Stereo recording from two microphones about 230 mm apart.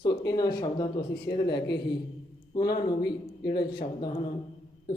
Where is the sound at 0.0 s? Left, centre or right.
Centre.